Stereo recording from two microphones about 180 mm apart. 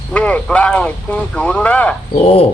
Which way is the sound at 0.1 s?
5° left (ahead or behind).